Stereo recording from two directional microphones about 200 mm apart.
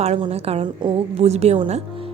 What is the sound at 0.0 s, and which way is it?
A woman's voice, 30° right (ahead or behind).